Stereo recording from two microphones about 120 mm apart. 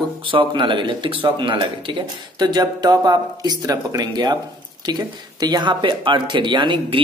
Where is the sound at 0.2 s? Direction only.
45° right (ahead or behind).